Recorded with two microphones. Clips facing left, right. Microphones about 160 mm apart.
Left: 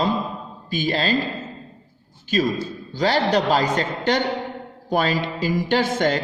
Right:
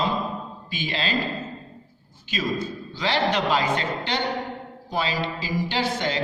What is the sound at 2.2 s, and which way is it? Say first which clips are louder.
A man's voice: left 5 dB; 45° left (ahead or behind).